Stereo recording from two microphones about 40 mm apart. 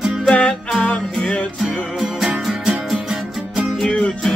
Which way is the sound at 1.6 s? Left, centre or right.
Centre.